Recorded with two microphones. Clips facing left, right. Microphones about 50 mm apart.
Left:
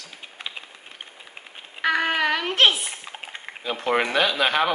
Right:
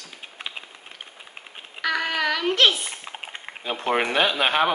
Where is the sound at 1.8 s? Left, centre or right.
Left.